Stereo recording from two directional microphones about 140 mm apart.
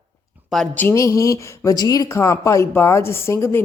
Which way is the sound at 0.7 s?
20° left (ahead or behind).